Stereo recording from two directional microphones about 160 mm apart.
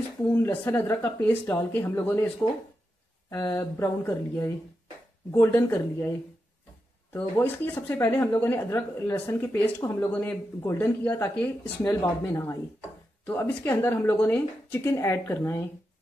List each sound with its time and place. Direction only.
0.3 s speech: 15° left (ahead or behind)
12.0 s speech: 20° left (ahead or behind)